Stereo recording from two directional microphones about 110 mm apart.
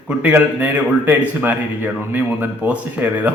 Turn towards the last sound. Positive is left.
turn(degrees=-15)  # may be behind; listen again after turning